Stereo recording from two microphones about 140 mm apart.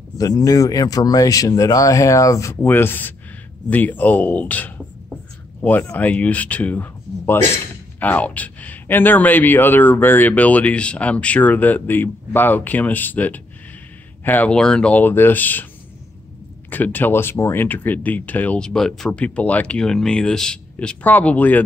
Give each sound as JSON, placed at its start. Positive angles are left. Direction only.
{"t": 0.2, "sound": "speech", "side_deg": 25}
{"t": 16.7, "sound": "speech", "side_deg": 15}